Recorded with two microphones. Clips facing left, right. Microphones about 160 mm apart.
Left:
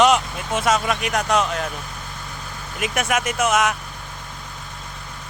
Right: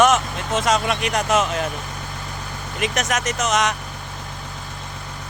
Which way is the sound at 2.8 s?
10° left (ahead or behind).